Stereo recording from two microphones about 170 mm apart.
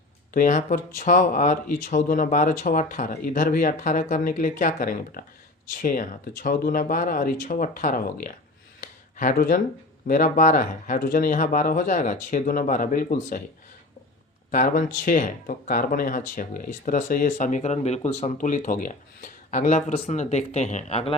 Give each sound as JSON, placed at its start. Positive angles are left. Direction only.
{"t": 0.3, "sound": "speech", "side_deg": 50}
{"t": 8.8, "sound": "a sound", "side_deg": 50}
{"t": 10.1, "sound": "speech", "side_deg": 50}
{"t": 14.5, "sound": "speech", "side_deg": 50}